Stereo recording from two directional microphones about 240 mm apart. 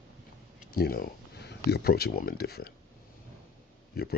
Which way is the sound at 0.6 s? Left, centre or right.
Left.